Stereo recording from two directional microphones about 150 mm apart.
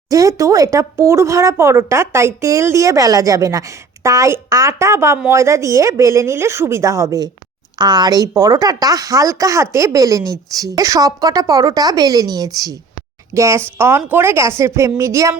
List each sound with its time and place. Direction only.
0.1 s speech: 20° right (ahead or behind)